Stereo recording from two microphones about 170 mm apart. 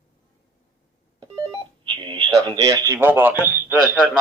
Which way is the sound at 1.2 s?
30° right (ahead or behind).